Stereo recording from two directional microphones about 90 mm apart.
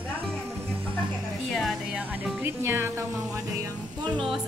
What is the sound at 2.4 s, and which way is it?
Speech, 25° right (ahead or behind).